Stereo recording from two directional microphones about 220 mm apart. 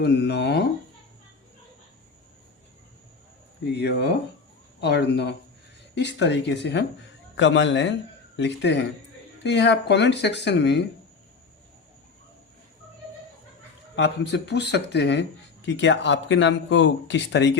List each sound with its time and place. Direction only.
0.0 s speech: 50° left (ahead or behind)
3.7 s speech: 50° left (ahead or behind)
13.9 s speech: 50° left (ahead or behind)